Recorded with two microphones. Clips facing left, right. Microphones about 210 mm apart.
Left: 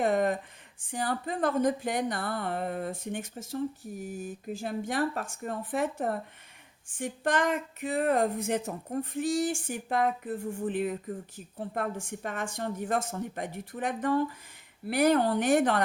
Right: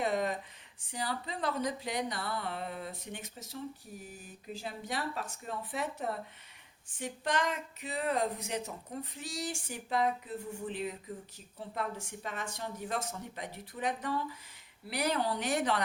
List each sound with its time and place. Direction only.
0.0 s a woman's voice: 50° left (ahead or behind)